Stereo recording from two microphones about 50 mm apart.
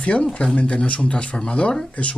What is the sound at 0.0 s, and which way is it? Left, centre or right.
Speech, left.